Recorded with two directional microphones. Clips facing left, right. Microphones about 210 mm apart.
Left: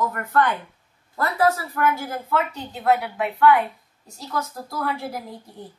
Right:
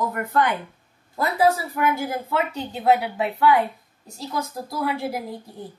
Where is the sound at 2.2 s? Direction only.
30° right (ahead or behind).